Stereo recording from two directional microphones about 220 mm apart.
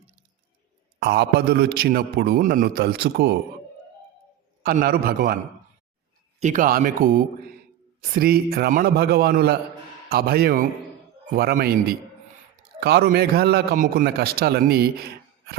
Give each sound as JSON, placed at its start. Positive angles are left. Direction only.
{"t": 0.9, "sound": "a man's voice", "side_deg": -45}
{"t": 4.6, "sound": "speech", "side_deg": -40}
{"t": 6.4, "sound": "a man's voice", "side_deg": -35}